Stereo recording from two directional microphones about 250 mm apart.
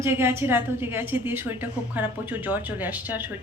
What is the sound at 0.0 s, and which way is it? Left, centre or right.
A woman's voice, centre.